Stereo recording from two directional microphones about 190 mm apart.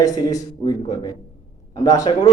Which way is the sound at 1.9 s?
20° left (ahead or behind).